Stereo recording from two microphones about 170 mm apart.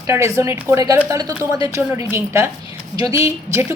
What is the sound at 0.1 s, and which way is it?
A woman's voice, 15° right (ahead or behind).